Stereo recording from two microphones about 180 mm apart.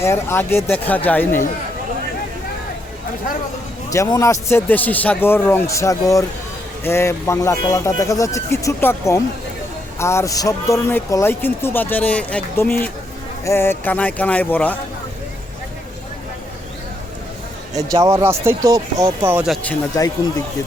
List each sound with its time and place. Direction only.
0.0 s speech: 15° left (ahead or behind)
3.8 s speech: 20° left (ahead or behind)
17.8 s speech: 20° right (ahead or behind)
19.9 s speech: 20° left (ahead or behind)